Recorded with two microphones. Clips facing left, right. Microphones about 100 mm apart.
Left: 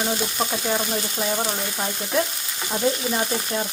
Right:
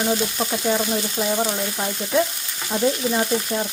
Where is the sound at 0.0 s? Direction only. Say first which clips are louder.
Right 2 dB; 5° left (ahead or behind).